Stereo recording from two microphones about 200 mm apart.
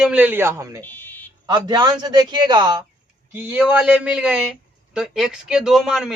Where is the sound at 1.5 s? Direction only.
20° right (ahead or behind).